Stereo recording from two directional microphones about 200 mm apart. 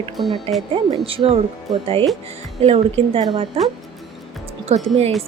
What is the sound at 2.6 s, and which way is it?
A woman's voice, 30° right (ahead or behind).